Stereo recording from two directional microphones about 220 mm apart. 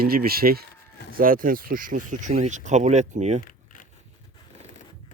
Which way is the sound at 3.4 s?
40° left (ahead or behind).